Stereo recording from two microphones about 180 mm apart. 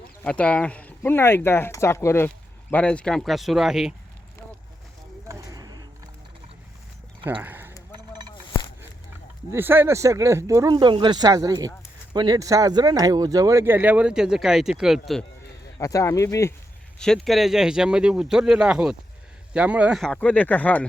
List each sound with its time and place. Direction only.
0.3 s speech: 5° left (ahead or behind)
5.3 s a sound: 20° right (ahead or behind)
7.4 s a sound: 10° right (ahead or behind)
9.5 s speech: 10° right (ahead or behind)
15.8 s speech: 15° left (ahead or behind)
17.0 s speech: centre (ahead or behind)